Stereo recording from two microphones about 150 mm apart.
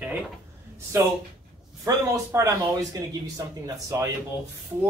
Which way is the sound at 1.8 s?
20° right (ahead or behind).